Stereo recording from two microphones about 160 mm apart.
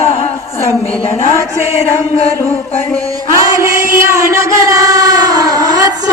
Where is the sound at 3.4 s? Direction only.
20° right (ahead or behind).